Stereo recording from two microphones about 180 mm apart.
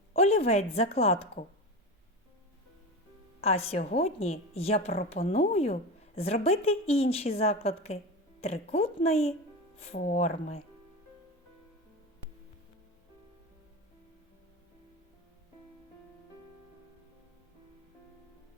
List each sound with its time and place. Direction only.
0.2 s a woman's voice: 35° left (ahead or behind)
3.4 s a woman's voice: 35° left (ahead or behind)